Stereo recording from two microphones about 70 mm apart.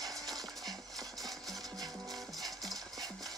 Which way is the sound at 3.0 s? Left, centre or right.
Centre.